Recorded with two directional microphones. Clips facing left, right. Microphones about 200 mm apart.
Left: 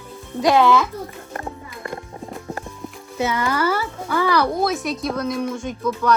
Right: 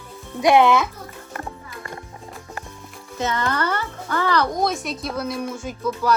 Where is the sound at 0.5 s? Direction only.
20° right (ahead or behind).